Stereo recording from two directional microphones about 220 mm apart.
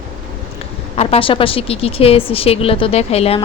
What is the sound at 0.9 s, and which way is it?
Speech, 25° left (ahead or behind).